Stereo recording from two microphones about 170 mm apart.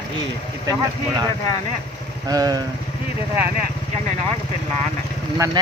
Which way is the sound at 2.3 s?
20° right (ahead or behind).